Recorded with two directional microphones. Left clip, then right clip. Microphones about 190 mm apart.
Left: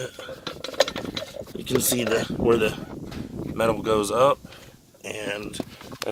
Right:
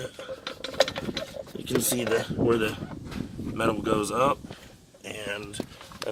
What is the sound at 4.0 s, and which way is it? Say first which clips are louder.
Speech: left 5 dB; 50° left (ahead or behind).